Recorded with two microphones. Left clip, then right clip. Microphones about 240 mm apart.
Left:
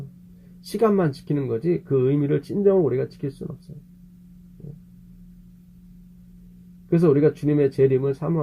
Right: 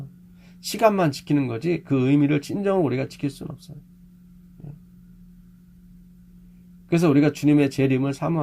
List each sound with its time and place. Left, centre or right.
0.6 s speech: right
6.9 s speech: right